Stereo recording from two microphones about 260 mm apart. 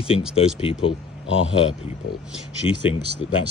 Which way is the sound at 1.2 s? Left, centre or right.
Left.